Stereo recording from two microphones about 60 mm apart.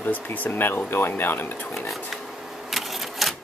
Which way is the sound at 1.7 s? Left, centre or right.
Centre.